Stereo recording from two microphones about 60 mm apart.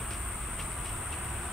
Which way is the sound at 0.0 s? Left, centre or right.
Centre.